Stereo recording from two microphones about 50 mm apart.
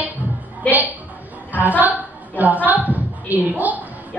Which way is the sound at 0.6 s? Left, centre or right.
Left.